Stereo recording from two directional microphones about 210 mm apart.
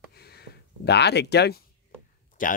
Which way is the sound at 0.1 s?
50° left (ahead or behind).